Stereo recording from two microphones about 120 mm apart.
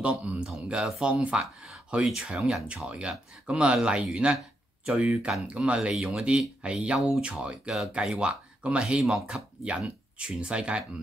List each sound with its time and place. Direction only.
0.0 s speech: 10° right (ahead or behind)